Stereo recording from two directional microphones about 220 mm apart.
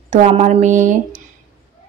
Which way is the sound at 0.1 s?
30° right (ahead or behind).